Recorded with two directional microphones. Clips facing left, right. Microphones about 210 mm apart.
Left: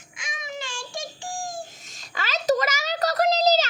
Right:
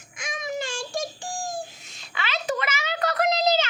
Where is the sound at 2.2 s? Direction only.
40° left (ahead or behind).